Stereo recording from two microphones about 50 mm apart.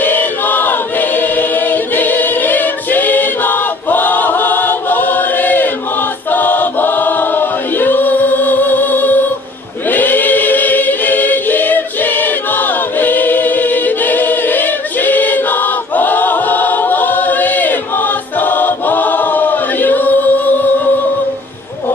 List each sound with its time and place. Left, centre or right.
0.0 s choir: left